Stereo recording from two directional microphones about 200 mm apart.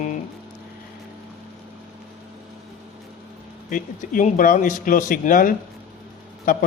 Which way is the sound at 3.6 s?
40° left (ahead or behind).